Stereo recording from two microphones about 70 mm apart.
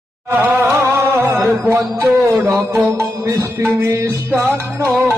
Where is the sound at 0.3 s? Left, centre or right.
Right.